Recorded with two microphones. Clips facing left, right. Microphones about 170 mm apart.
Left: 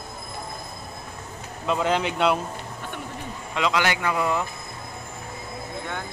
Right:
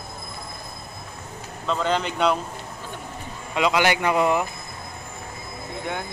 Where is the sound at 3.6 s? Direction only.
10° right (ahead or behind).